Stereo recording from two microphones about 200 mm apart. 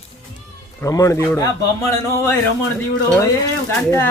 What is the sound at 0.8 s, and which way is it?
A man's voice, 15° left (ahead or behind).